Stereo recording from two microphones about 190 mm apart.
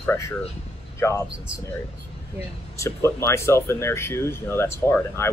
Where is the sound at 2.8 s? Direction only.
15° left (ahead or behind).